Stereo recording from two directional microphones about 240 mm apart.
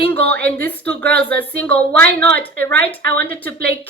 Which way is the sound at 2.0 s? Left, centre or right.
Right.